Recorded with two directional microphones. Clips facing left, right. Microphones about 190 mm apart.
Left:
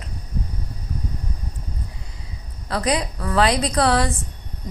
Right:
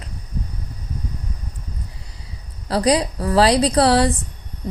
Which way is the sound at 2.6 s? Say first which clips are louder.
Right 5 dB; 30° right (ahead or behind).